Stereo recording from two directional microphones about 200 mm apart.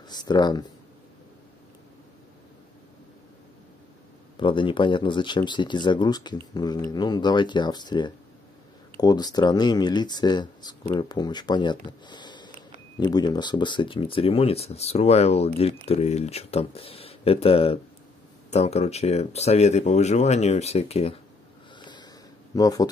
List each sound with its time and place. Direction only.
0.1 s speech: 20° left (ahead or behind)
4.4 s speech: 25° left (ahead or behind)
21.7 s wheeze: 20° left (ahead or behind)
22.6 s speech: 20° left (ahead or behind)